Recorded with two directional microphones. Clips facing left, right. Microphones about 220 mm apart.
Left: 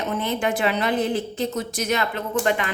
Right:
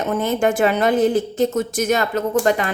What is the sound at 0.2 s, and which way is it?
A woman's voice, 45° right (ahead or behind).